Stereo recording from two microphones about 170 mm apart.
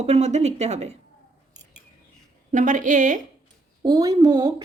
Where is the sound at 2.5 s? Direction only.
50° right (ahead or behind).